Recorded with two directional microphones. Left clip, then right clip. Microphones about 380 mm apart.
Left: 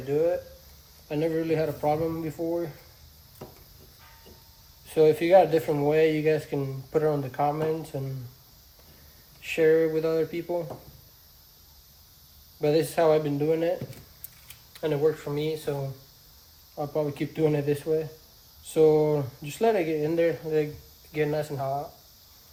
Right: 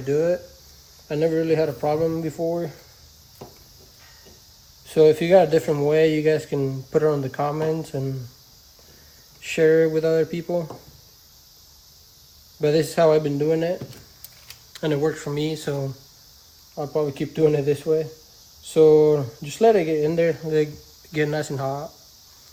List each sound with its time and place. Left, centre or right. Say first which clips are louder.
1.0 s speech: right 6 dB; right
4.9 s speech: right 4 dB; right
9.4 s speech: right 4 dB; right
12.5 s speech: right 4 dB; right
16.7 s speech: right 4 dB; right